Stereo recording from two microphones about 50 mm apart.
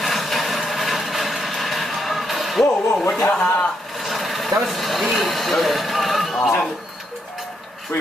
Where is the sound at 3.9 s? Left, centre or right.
Centre.